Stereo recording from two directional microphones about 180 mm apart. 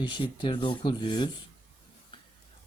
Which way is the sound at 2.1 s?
25° left (ahead or behind).